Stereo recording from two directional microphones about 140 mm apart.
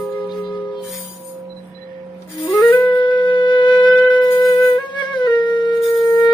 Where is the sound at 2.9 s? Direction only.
35° left (ahead or behind).